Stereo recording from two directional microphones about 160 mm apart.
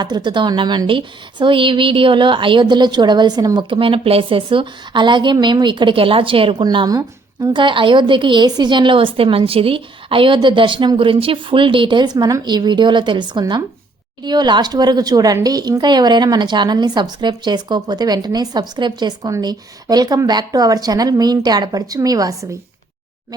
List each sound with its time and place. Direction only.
0.0 s a woman's voice: 25° right (ahead or behind)